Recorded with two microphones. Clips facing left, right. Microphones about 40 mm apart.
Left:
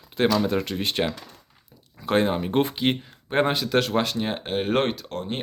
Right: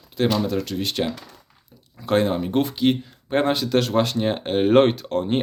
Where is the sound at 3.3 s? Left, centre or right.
Centre.